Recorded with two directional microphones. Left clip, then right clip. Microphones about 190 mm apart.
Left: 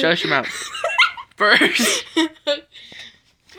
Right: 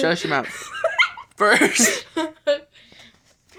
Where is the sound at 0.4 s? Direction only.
50° left (ahead or behind).